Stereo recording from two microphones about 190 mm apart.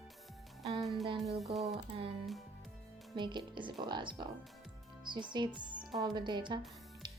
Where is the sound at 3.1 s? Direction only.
25° right (ahead or behind).